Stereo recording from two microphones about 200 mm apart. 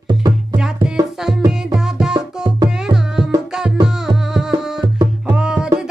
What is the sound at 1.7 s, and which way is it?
Music, 5° right (ahead or behind).